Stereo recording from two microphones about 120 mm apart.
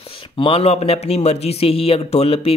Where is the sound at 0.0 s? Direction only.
45° left (ahead or behind).